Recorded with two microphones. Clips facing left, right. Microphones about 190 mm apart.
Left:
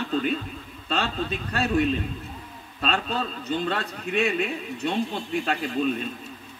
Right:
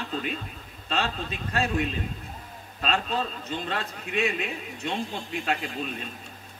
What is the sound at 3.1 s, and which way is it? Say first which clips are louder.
A man's voice: left 2 dB; 40° left (ahead or behind).